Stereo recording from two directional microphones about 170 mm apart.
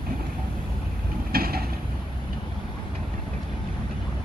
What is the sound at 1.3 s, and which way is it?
Vehicle, 60° right (ahead or behind).